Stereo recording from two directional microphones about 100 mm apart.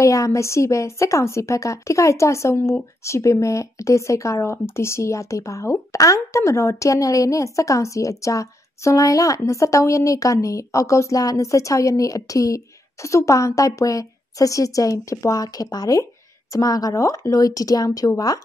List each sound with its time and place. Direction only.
0.0 s a woman's voice: 30° left (ahead or behind)